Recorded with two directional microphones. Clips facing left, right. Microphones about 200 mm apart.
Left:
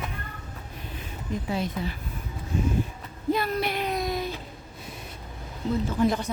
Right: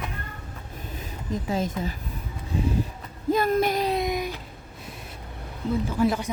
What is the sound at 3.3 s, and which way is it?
Speech, 45° right (ahead or behind).